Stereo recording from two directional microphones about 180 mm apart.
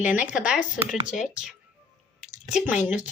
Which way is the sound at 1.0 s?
45° left (ahead or behind).